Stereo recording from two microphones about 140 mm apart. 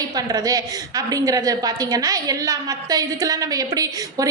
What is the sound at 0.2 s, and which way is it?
A woman's voice, 25° right (ahead or behind).